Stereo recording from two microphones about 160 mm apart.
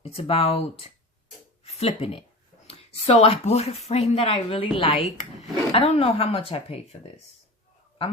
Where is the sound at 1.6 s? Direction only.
40° left (ahead or behind).